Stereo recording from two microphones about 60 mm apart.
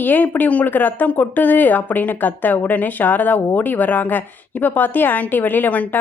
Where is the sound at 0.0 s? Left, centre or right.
Left.